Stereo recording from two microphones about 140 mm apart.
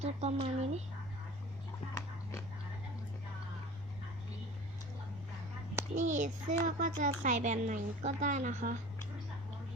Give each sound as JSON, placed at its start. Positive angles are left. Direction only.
{"t": 0.0, "sound": "speech", "side_deg": -50}
{"t": 6.0, "sound": "speech", "side_deg": -65}